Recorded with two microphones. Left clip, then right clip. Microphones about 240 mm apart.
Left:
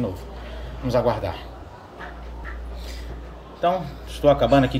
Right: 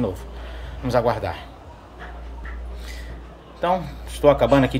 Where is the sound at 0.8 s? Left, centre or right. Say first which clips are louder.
Right 1 dB; centre.